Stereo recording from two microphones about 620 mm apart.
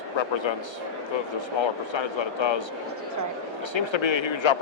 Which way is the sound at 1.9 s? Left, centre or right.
Left.